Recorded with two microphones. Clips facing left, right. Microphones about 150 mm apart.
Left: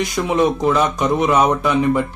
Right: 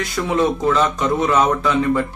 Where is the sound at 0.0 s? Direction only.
15° left (ahead or behind).